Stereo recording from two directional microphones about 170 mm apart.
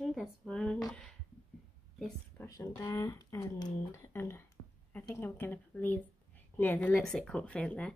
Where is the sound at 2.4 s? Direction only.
15° left (ahead or behind).